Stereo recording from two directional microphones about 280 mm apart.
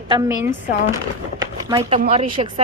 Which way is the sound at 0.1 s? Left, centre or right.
Centre.